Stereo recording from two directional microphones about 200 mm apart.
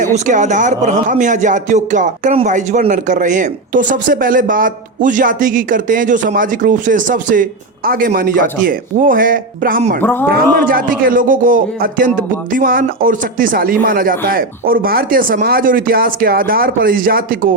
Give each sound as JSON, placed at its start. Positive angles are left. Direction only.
{"t": 0.0, "sound": "speech", "side_deg": -40}
{"t": 10.0, "sound": "speech", "side_deg": 10}
{"t": 10.5, "sound": "speech", "side_deg": -45}